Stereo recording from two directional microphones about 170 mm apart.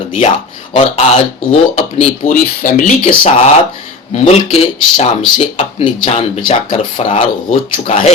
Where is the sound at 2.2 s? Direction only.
50° left (ahead or behind).